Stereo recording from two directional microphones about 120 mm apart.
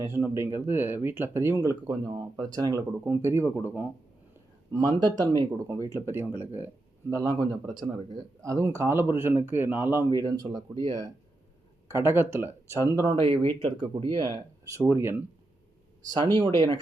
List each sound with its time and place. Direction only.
0.0 s a man's voice: 20° right (ahead or behind)
3.0 s speech: 20° right (ahead or behind)
4.7 s speech: 35° right (ahead or behind); by 6.7 s 15° right (ahead or behind)
7.1 s a man's voice: 30° right (ahead or behind)
8.4 s speech: 25° right (ahead or behind)
10.2 s a man's voice: 30° right (ahead or behind)
11.9 s speech: 20° right (ahead or behind)
13.1 s speech: 50° right (ahead or behind)
14.2 s speech: 30° right (ahead or behind)
16.1 s a man's voice: 40° right (ahead or behind)